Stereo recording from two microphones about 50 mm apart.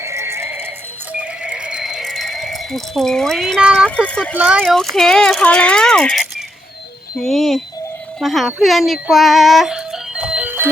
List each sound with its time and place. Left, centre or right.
0.0 s music: right
1.2 s neigh: right
1.8 s horse: centre
3.3 s speech: centre
3.8 s speech: left
4.6 s speech: centre
5.4 s speech: left
5.7 s speech: centre
7.2 s speech: centre
10.3 s music: right